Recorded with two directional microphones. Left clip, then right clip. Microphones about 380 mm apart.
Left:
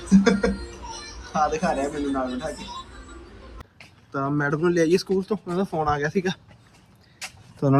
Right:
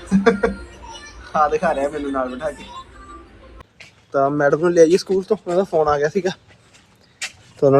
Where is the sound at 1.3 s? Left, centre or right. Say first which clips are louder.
Right 6 dB; centre.